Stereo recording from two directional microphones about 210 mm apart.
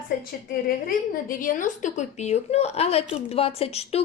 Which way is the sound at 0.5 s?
40° left (ahead or behind).